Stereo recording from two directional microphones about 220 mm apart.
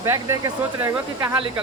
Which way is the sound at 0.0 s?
10° right (ahead or behind).